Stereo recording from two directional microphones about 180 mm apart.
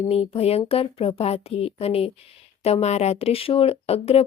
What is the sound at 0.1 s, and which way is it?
Speech, 35° left (ahead or behind).